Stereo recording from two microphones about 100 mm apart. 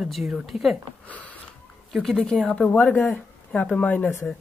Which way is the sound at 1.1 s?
15° left (ahead or behind).